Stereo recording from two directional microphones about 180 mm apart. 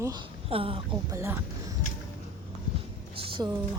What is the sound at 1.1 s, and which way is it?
Speech, 15° right (ahead or behind).